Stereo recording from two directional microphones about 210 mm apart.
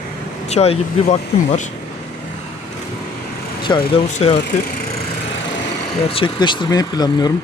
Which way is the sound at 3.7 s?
15° left (ahead or behind).